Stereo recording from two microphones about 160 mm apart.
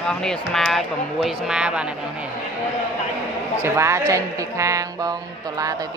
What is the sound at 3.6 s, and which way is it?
A woman's voice, 15° right (ahead or behind).